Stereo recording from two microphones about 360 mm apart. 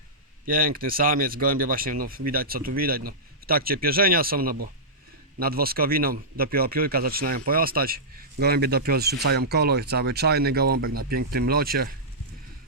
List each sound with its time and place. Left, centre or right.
0.4 s speech: right